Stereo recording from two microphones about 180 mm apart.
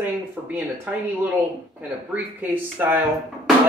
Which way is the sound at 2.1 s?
10° right (ahead or behind).